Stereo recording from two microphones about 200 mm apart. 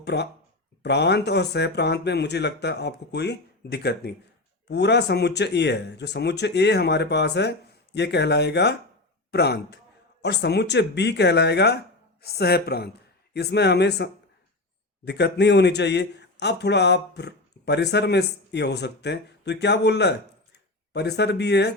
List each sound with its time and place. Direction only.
0.0 s a man's voice: 55° left (ahead or behind)